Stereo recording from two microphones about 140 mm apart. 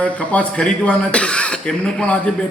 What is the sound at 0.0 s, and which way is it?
A man's voice, 10° left (ahead or behind).